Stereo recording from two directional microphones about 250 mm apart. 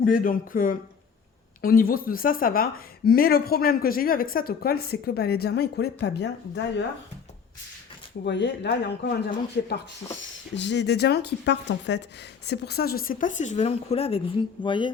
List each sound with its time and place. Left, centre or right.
0.0 s speech: left
8.2 s speech: left; by 14.9 s centre